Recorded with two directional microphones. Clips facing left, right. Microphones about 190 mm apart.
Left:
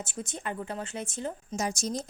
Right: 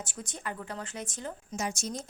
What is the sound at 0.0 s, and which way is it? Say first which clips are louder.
A woman's voice: left 3 dB; 25° left (ahead or behind).